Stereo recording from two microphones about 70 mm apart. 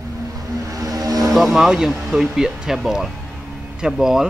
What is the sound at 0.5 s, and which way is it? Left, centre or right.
Vehicle, right.